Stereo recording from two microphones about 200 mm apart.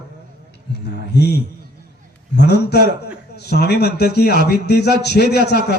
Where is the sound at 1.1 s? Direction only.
55° left (ahead or behind).